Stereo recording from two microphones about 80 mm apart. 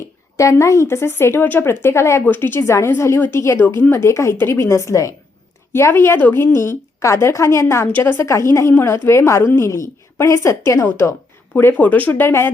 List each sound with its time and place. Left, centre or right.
0.3 s a woman's voice: left